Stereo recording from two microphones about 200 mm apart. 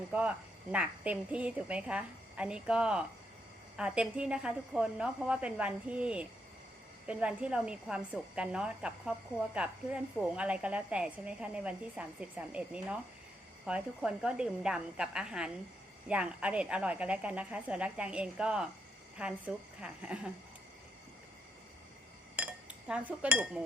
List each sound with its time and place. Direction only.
0.1 s a woman's voice: 5° right (ahead or behind)
22.9 s speech: 5° right (ahead or behind)